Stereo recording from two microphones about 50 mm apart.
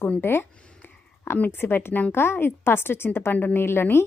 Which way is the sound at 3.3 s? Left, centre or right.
Left.